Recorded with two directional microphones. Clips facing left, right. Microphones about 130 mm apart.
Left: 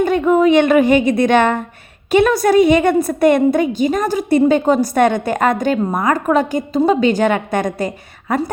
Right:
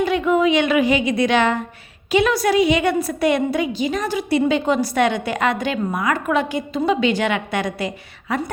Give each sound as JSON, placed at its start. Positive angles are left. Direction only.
{"t": 0.0, "sound": "a woman's voice", "side_deg": 45}